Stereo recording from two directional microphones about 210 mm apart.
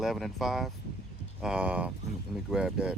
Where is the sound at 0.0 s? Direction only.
Centre (ahead or behind).